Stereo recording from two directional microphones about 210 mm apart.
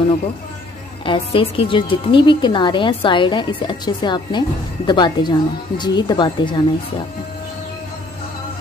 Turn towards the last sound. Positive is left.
turn(degrees=20)  # may be behind; listen again after turning